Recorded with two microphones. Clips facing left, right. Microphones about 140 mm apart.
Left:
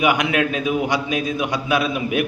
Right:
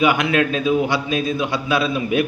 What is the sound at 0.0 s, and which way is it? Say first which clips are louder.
A man's voice: right 1 dB; 15° left (ahead or behind).